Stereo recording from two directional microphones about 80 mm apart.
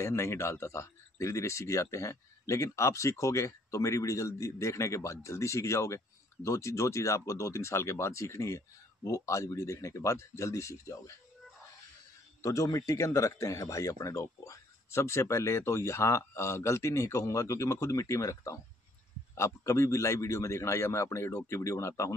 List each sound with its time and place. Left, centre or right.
0.0 s speech: left
12.4 s speech: left